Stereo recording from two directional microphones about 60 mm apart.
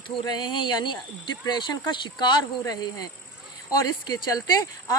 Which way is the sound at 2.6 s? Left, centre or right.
Left.